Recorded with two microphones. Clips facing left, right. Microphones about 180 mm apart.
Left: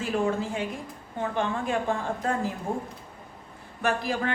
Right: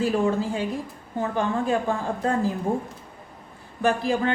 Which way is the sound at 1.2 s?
35° right (ahead or behind).